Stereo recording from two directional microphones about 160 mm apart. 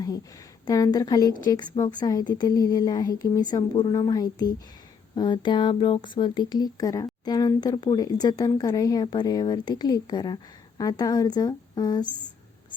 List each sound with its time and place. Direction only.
0.7 s speech: 25° left (ahead or behind)